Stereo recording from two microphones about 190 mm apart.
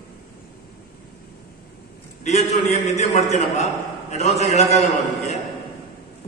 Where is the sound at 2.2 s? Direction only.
35° left (ahead or behind).